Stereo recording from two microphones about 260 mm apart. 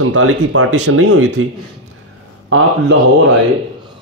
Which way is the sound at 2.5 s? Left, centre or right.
Right.